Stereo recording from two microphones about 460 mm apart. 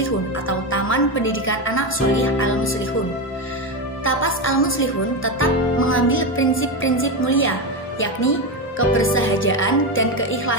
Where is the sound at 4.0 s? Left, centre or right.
Left.